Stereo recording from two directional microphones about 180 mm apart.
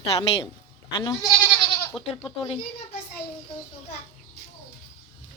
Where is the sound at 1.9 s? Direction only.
5° left (ahead or behind).